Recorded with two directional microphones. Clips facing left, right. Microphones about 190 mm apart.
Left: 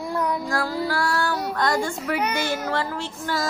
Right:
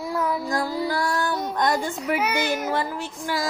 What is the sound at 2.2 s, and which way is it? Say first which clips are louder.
Child singing: right 1 dB; 10° right (ahead or behind).